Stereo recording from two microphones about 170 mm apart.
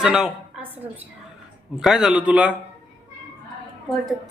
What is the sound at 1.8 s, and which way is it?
Speech, 5° right (ahead or behind).